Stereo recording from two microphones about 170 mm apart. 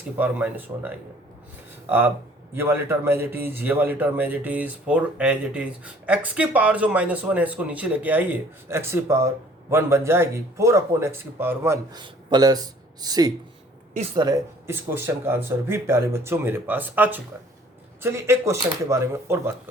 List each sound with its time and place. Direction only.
0.2 s speech: 10° right (ahead or behind)
2.5 s speech: 15° right (ahead or behind)
11.9 s speech: 25° right (ahead or behind)
13.9 s speech: 35° right (ahead or behind)
14.2 s speech: 20° right (ahead or behind)